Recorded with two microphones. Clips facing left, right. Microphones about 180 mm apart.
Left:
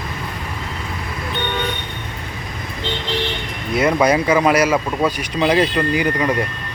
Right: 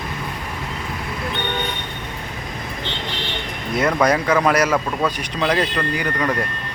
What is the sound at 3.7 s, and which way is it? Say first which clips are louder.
Speech: left 2 dB; 5° left (ahead or behind).